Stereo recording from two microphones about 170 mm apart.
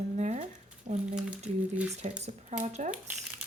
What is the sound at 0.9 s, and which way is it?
Speech, 5° right (ahead or behind).